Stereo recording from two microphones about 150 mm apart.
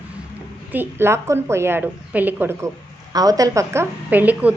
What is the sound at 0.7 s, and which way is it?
A woman's voice, 15° right (ahead or behind).